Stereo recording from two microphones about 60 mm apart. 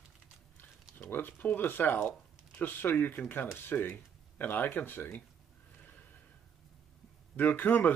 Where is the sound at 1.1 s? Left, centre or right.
Left.